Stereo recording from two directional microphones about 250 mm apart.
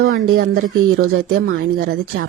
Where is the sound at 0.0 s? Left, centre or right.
Right.